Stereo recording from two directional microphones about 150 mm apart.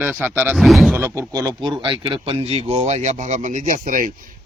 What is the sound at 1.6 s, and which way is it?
Speech, 30° right (ahead or behind).